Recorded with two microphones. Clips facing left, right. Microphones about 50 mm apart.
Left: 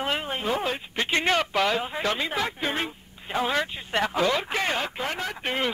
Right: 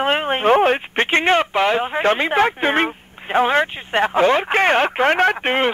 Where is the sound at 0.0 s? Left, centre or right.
Right.